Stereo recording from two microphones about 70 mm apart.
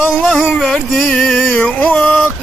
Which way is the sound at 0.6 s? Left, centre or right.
Centre.